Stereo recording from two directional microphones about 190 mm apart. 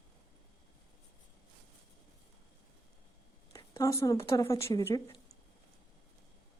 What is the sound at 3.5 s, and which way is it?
A woman's voice, 15° left (ahead or behind).